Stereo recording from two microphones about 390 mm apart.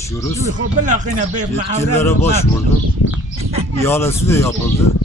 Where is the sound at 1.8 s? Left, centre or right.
Centre.